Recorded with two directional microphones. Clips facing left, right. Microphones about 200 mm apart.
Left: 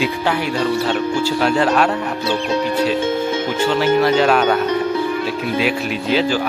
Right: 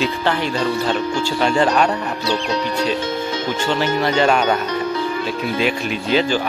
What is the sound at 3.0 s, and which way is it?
Speech, 55° left (ahead or behind).